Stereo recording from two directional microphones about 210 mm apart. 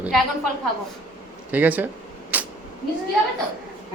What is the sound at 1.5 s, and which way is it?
Speech, 10° right (ahead or behind).